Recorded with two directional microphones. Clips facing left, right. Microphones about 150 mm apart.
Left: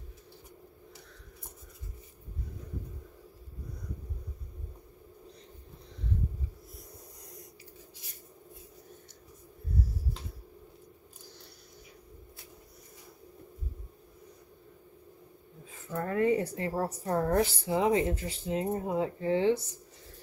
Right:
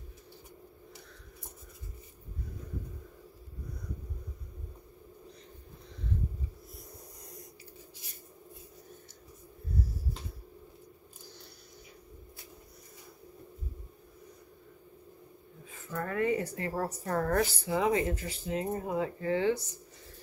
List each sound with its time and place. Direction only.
16.0 s a woman's voice: 30° left (ahead or behind)